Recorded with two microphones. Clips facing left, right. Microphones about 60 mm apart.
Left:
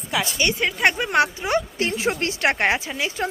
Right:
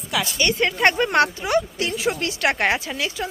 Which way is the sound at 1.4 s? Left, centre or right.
Left.